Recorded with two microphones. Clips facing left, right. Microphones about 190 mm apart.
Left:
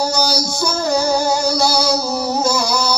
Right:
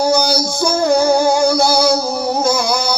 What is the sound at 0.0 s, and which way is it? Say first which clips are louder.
Music: right 4 dB; 55° right (ahead or behind).